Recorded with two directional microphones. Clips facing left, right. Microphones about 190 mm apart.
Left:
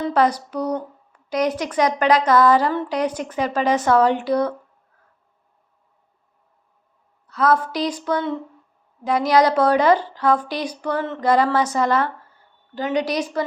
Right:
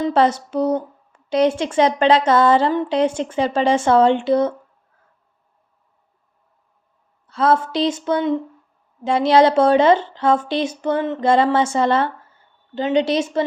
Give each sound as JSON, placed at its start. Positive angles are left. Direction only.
{"t": 0.0, "sound": "a woman's voice", "side_deg": -25}
{"t": 7.3, "sound": "a woman's voice", "side_deg": -25}